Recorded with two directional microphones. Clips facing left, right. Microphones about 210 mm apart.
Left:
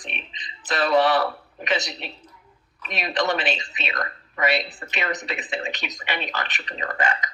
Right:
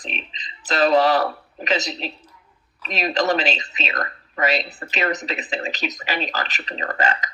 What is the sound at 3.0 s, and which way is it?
Speech, 40° right (ahead or behind).